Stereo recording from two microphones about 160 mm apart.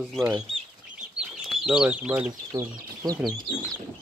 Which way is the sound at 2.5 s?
25° right (ahead or behind).